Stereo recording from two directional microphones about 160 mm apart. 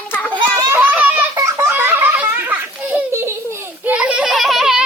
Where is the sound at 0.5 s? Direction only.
15° right (ahead or behind).